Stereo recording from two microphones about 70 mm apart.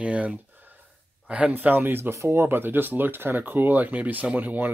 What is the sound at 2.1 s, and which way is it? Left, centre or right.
Speech, right.